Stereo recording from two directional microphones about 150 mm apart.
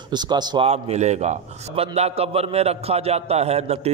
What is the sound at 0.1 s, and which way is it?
Speech, 30° right (ahead or behind).